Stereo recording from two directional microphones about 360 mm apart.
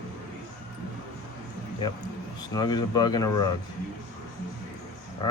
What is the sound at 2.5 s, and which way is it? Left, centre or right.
Speech, centre.